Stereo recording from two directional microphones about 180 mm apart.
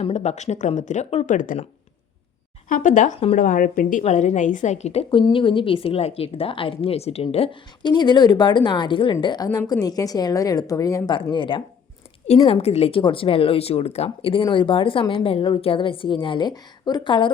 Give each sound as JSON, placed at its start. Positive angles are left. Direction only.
{"t": 0.0, "sound": "speech", "side_deg": 40}
{"t": 2.6, "sound": "a woman's voice", "side_deg": 45}